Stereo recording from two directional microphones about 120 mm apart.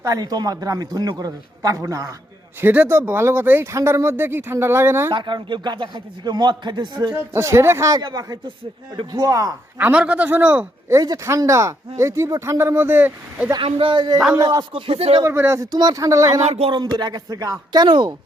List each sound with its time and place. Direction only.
0.0 s a man's voice: 30° right (ahead or behind)
2.6 s speech: 15° right (ahead or behind)
5.1 s a man's voice: 40° right (ahead or behind)
7.2 s speech: 20° right (ahead or behind)
9.7 s a man's voice: 10° right (ahead or behind)
10.8 s speech: 30° right (ahead or behind)
13.6 s speech: 50° right (ahead or behind)
15.2 s speech: 20° right (ahead or behind)
16.4 s speech: 65° right (ahead or behind)
16.7 s a man's voice: 35° right (ahead or behind)